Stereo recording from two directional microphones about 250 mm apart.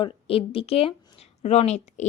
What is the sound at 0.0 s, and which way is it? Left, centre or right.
Speech, left.